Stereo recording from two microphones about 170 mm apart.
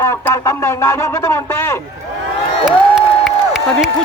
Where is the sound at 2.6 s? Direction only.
5° right (ahead or behind).